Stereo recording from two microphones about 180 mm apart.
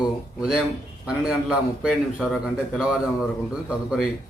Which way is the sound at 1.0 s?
5° right (ahead or behind).